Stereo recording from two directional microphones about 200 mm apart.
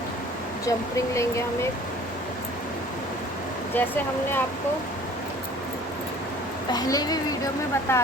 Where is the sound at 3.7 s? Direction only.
10° left (ahead or behind).